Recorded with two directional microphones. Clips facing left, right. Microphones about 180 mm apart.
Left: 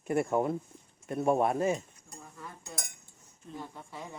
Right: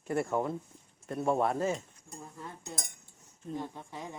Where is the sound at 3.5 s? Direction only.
15° right (ahead or behind).